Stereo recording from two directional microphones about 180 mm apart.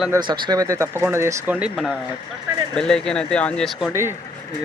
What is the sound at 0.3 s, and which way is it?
Speech, 25° right (ahead or behind).